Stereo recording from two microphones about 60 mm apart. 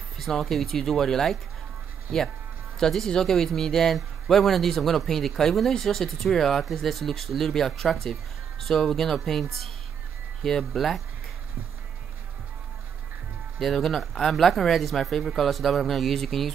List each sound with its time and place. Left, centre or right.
0.2 s speech: centre
2.8 s speech: centre
13.6 s speech: centre